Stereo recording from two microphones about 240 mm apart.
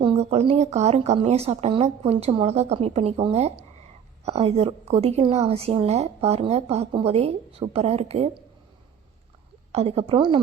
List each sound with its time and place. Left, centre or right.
0.0 s a woman's voice: right
9.7 s a woman's voice: right